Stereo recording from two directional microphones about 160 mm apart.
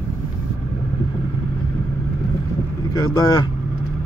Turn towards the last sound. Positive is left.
turn(degrees=25)  # may be behind; listen again after turning